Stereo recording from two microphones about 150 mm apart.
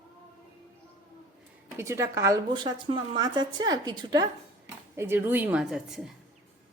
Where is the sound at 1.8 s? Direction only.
20° right (ahead or behind).